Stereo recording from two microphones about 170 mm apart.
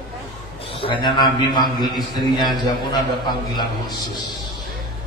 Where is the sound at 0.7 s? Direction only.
30° left (ahead or behind).